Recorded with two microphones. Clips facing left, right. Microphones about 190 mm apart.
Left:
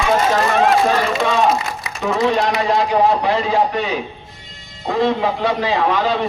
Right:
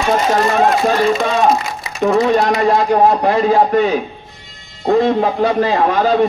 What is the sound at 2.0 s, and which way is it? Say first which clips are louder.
A man's voice: right 4 dB; 50° right (ahead or behind).